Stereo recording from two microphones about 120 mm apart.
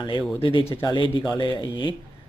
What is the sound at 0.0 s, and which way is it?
Speech, 40° left (ahead or behind).